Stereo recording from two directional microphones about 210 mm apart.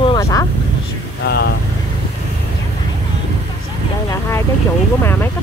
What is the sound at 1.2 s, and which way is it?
Speech, 50° left (ahead or behind).